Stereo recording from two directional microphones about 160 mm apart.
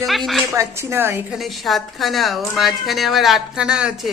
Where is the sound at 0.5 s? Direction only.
15° right (ahead or behind).